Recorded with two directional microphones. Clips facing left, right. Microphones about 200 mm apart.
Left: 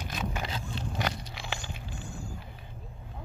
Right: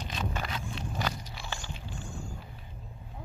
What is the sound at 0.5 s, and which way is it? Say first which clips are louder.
Biting: left 1 dB; 30° left (ahead or behind).